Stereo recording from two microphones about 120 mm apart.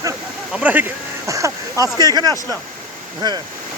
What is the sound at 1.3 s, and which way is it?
Speech, 25° right (ahead or behind).